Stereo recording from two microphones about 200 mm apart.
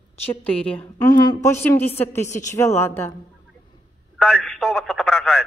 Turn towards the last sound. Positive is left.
turn(degrees=0)  # may be behind; listen again after turning